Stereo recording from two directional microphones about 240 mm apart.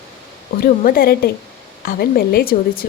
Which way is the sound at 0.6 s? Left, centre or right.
Left.